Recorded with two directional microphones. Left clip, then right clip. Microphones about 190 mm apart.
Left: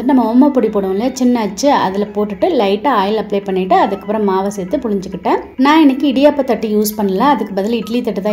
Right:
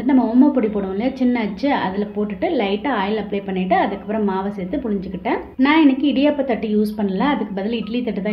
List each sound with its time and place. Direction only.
0.0 s a woman's voice: 20° left (ahead or behind)